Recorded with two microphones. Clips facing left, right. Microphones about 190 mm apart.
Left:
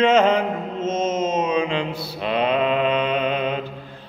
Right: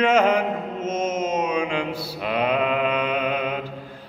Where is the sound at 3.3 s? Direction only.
25° left (ahead or behind).